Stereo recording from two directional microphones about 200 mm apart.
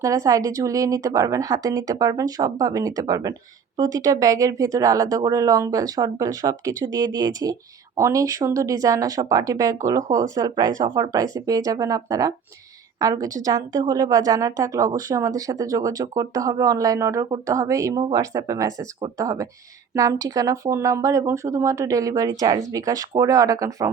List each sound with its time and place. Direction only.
0.0 s a woman's voice: 15° right (ahead or behind)